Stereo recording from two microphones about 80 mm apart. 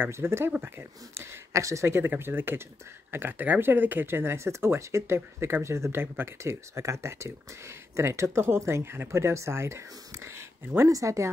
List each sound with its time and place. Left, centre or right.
0.0 s speech: right
0.5 s speech: right
1.1 s speech: right